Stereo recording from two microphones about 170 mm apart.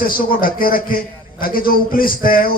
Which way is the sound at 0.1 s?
55° left (ahead or behind).